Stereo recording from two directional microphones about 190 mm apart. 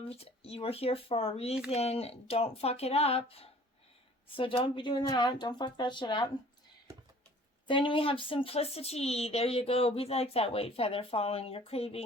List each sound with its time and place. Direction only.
0.1 s speech: 30° left (ahead or behind)
7.7 s speech: 25° left (ahead or behind)